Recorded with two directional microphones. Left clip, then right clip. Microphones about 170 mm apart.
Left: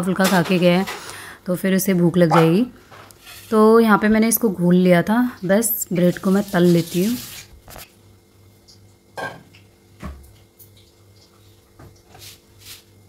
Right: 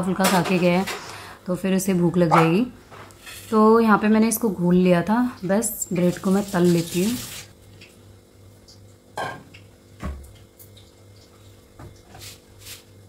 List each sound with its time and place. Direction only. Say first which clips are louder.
0.0 s speech: left 2 dB; 20° left (ahead or behind)